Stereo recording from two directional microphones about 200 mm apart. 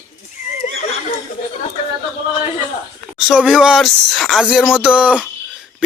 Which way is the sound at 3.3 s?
5° right (ahead or behind).